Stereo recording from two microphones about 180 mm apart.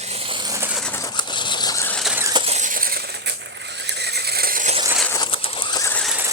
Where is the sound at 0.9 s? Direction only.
20° left (ahead or behind).